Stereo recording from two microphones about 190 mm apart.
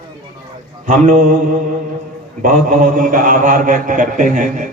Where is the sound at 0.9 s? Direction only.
45° right (ahead or behind).